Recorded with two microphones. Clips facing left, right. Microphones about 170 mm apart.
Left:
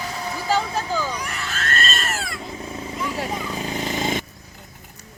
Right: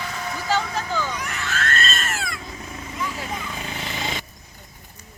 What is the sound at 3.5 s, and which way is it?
Vehicle, 40° left (ahead or behind).